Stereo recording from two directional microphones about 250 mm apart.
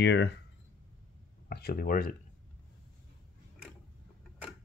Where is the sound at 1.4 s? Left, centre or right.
Left.